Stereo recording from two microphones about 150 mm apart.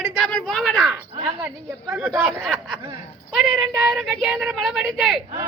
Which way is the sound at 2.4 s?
Centre (ahead or behind).